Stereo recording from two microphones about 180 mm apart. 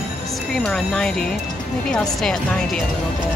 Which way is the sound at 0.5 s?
5° left (ahead or behind).